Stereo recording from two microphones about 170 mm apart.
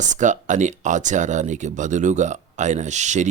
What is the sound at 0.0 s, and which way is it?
A man's voice, 45° right (ahead or behind).